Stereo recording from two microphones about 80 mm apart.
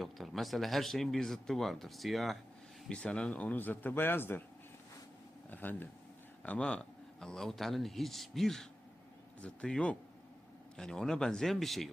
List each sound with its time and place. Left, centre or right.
0.0 s speech: centre
2.9 s speech: centre
5.5 s speech: left; by 11.9 s centre